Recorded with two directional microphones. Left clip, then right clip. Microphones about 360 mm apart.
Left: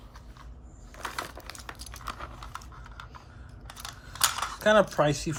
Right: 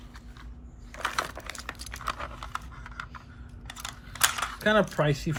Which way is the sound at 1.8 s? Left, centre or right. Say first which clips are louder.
Right 4 dB; centre.